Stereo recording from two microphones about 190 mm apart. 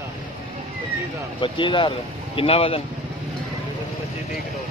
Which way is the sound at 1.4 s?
25° left (ahead or behind).